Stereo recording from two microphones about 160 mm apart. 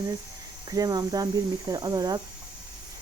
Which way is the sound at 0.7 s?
20° right (ahead or behind).